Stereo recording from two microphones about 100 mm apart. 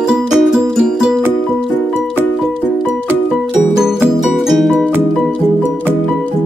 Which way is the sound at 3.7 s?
5° right (ahead or behind).